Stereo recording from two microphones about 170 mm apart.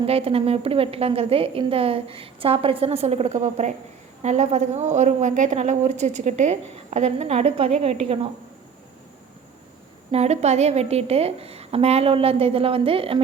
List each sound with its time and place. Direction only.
0.0 s a woman's voice: 35° right (ahead or behind)
10.1 s a woman's voice: 40° right (ahead or behind)